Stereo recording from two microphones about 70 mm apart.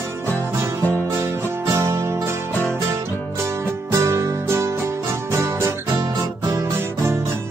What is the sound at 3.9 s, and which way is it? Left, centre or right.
Music, right.